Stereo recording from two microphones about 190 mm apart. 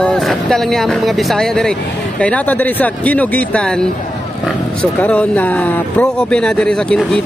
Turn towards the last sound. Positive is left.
turn(degrees=5)  # may be behind; listen again after turning